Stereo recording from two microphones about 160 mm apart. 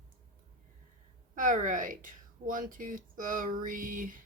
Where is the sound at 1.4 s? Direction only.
55° right (ahead or behind).